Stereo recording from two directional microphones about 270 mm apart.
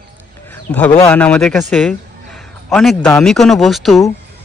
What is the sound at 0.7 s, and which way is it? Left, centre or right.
Speech, centre.